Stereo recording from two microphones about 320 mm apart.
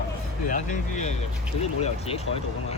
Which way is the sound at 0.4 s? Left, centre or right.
Left.